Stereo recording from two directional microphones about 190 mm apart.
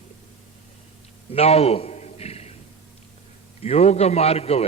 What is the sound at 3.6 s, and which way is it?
A man's voice, 35° left (ahead or behind).